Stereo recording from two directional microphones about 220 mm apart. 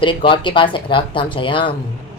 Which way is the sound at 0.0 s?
25° left (ahead or behind).